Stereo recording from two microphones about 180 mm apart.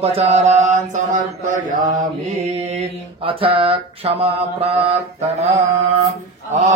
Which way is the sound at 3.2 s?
30° right (ahead or behind).